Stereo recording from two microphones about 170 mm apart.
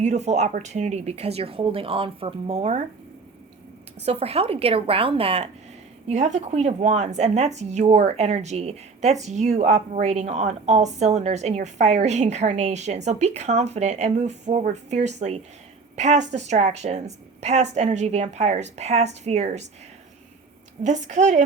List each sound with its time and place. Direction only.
0.0 s speech: 45° right (ahead or behind)
4.0 s speech: 35° right (ahead or behind)
20.8 s a woman's voice: 45° right (ahead or behind)